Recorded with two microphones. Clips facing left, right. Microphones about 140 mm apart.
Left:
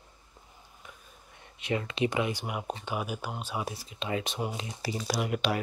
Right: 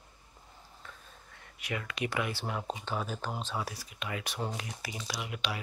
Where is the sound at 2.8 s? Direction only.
10° left (ahead or behind).